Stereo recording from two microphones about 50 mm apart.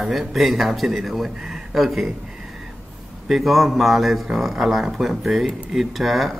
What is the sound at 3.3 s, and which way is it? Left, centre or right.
Speech, centre.